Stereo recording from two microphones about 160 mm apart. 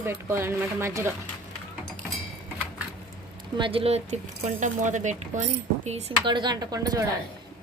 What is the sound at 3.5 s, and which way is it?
Speech, 35° right (ahead or behind).